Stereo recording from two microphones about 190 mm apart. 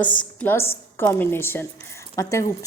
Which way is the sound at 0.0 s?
5° left (ahead or behind).